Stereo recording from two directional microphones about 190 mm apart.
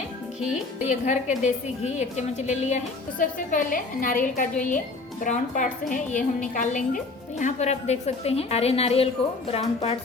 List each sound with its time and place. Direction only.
0.3 s speech: 5° right (ahead or behind)
0.9 s a woman's voice: 40° left (ahead or behind)